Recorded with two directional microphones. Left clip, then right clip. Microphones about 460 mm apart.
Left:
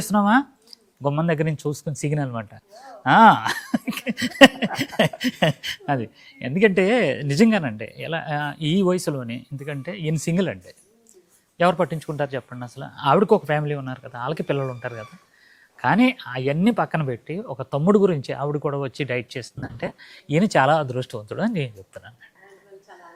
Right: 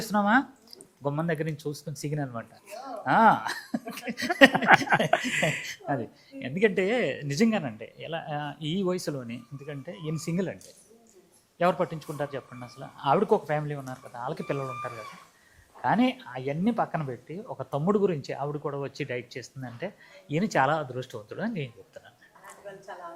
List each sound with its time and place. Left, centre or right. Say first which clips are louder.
0.0 s speech: left 5 dB; left